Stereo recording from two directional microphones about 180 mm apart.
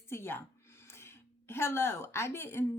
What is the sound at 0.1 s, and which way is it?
A woman's voice, 15° left (ahead or behind).